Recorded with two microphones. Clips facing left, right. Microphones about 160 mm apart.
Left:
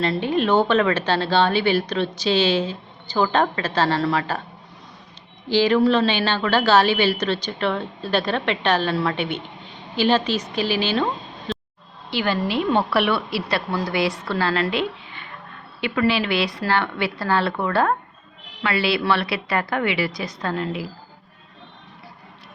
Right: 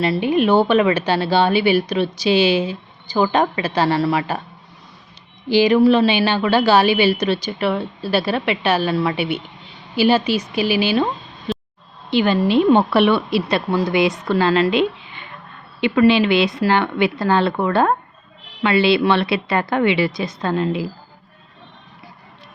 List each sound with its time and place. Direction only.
0.0 s speech: 10° right (ahead or behind)
5.5 s a woman's voice: 15° right (ahead or behind)
12.1 s a woman's voice: 20° right (ahead or behind)